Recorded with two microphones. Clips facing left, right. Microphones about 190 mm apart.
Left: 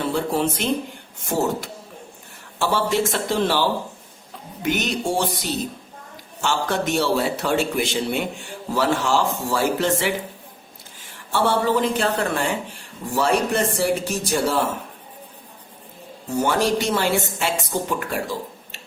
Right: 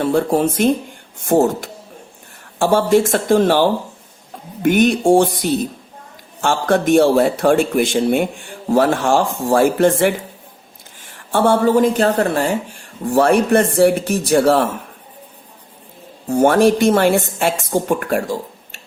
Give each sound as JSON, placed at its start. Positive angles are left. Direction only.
{"t": 0.1, "sound": "a woman's voice", "side_deg": -50}
{"t": 11.3, "sound": "a woman's voice", "side_deg": -50}
{"t": 13.1, "sound": "speech", "side_deg": -55}
{"t": 16.3, "sound": "a woman's voice", "side_deg": -55}